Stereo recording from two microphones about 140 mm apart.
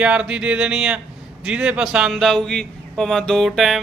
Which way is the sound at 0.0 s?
5° right (ahead or behind).